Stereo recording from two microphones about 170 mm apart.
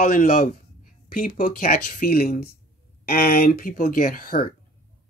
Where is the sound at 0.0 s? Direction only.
60° left (ahead or behind).